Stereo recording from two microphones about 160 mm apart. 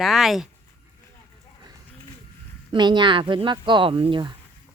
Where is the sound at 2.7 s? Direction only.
30° right (ahead or behind).